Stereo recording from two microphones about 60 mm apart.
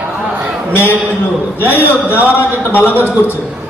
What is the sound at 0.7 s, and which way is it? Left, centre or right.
A man's voice, left.